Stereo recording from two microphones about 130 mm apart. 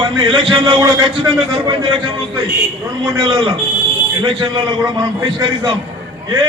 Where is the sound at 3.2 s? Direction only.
35° right (ahead or behind).